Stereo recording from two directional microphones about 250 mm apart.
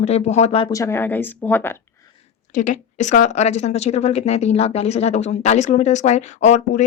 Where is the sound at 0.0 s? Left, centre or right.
Left; by 1.8 s centre.